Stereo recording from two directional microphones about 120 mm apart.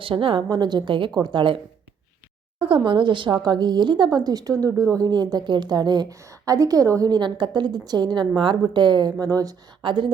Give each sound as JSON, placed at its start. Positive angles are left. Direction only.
{"t": 0.0, "sound": "a woman's voice", "side_deg": -45}
{"t": 2.6, "sound": "speech", "side_deg": -45}
{"t": 9.8, "sound": "a woman's voice", "side_deg": -45}